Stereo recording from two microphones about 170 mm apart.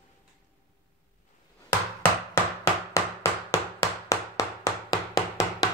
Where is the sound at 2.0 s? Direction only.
15° left (ahead or behind).